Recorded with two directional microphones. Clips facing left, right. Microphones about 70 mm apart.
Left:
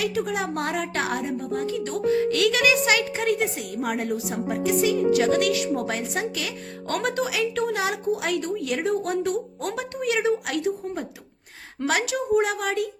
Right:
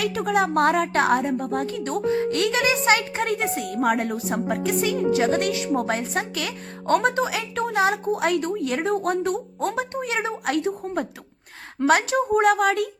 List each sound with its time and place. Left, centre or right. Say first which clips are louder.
0.0 s a woman's voice: right 4 dB; right
5.1 s speech: left 1 dB; right
6.8 s a woman's voice: right 5 dB; right